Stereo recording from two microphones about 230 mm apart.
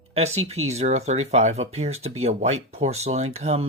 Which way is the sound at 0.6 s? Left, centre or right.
Right.